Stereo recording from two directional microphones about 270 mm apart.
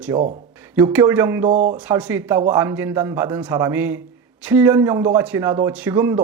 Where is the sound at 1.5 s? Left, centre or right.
Right.